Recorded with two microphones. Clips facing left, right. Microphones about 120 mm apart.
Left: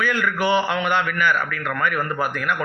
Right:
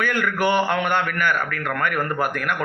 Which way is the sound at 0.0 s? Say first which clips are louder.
Even; 50° right (ahead or behind).